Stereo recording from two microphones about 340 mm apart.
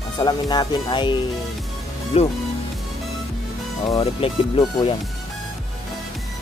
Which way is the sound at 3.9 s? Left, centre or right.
Centre.